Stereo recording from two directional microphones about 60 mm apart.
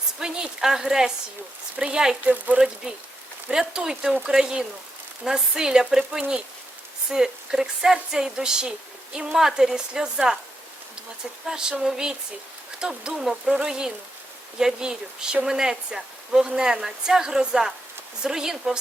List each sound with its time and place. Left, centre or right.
0.2 s speech: centre
2.5 s speech: right
3.5 s speech: centre
11.4 s speech: centre